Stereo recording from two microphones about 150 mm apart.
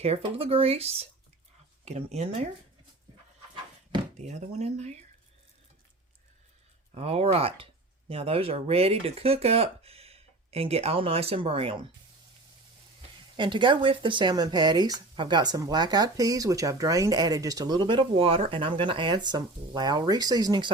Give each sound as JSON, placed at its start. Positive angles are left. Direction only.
{"t": 0.0, "sound": "speech", "side_deg": -40}
{"t": 4.2, "sound": "speech", "side_deg": -50}
{"t": 6.9, "sound": "speech", "side_deg": -45}
{"t": 13.0, "sound": "speech", "side_deg": -35}